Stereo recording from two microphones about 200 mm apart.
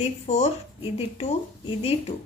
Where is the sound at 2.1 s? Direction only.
25° left (ahead or behind).